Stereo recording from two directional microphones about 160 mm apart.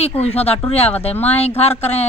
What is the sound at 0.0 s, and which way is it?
Speech, 40° left (ahead or behind).